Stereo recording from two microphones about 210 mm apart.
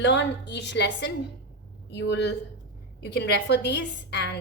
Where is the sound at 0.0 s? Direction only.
55° left (ahead or behind).